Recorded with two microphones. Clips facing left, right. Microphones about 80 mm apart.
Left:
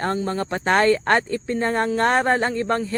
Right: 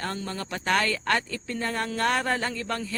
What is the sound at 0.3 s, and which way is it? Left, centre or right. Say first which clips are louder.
Speech: left 6 dB; left.